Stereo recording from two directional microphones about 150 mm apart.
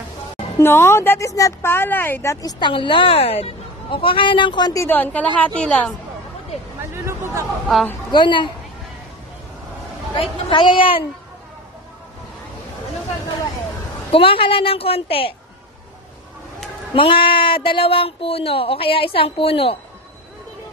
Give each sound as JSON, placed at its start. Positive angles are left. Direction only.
{"t": 0.6, "sound": "speech", "side_deg": 15}
{"t": 2.4, "sound": "speech", "side_deg": 30}
{"t": 4.8, "sound": "speech", "side_deg": 10}
{"t": 7.6, "sound": "a woman's voice", "side_deg": 0}
{"t": 8.1, "sound": "speech", "side_deg": 30}
{"t": 10.1, "sound": "speech", "side_deg": 35}
{"t": 14.1, "sound": "speech", "side_deg": 35}
{"t": 16.9, "sound": "speech", "side_deg": 35}